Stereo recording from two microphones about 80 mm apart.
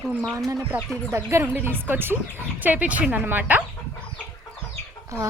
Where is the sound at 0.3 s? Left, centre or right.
Right.